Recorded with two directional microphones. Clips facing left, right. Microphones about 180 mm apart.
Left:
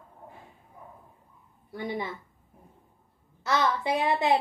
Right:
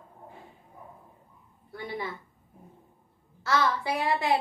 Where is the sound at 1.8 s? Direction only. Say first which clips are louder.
Left 3 dB; 20° left (ahead or behind).